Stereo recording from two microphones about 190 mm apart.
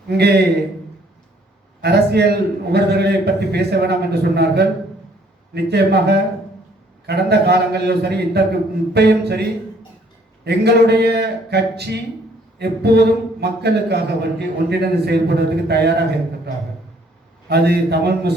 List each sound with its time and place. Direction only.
0.1 s speech: 60° right (ahead or behind)
1.8 s speech: 60° right (ahead or behind)
17.5 s speech: 60° right (ahead or behind)